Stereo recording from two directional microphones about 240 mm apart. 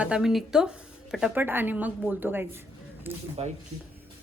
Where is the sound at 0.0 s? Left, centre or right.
Centre.